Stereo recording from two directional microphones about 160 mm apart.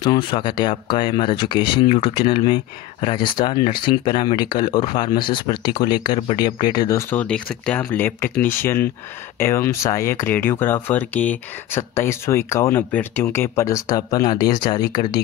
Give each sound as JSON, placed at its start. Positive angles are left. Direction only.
{"t": 0.0, "sound": "speech", "side_deg": 30}